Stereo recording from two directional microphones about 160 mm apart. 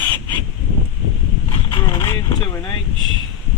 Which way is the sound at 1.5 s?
30° left (ahead or behind).